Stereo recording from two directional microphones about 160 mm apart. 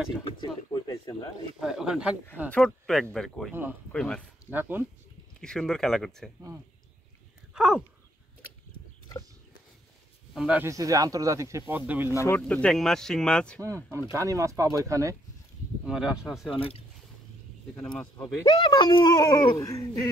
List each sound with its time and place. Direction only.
0.4 s speech: 25° left (ahead or behind)
1.6 s speech: 5° right (ahead or behind)
4.5 s speech: 15° right (ahead or behind)
5.4 s speech: 5° left (ahead or behind)
7.5 s speech: 5° right (ahead or behind)
10.3 s speech: 5° right (ahead or behind)
10.7 s speech: 20° right (ahead or behind)
12.4 s speech: 5° left (ahead or behind)
13.6 s speech: 20° right (ahead or behind)
15.8 s speech: 5° right (ahead or behind)
16.3 s speech: 10° left (ahead or behind)
16.5 s speech: 35° left (ahead or behind)
18.1 s speech: 25° left (ahead or behind)